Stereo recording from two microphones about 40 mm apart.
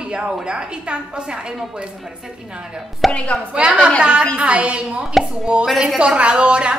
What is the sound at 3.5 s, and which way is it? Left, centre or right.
A woman's voice, right.